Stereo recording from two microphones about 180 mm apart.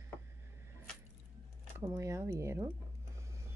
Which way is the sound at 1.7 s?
15° right (ahead or behind).